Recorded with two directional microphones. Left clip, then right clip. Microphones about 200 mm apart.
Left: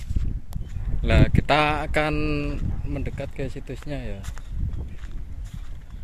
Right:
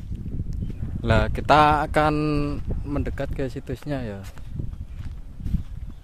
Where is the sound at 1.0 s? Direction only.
20° right (ahead or behind).